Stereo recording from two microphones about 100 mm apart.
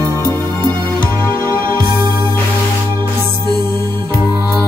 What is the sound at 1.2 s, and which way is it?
Music, 25° left (ahead or behind).